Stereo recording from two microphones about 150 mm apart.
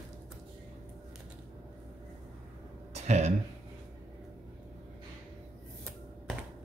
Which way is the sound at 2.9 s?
50° right (ahead or behind).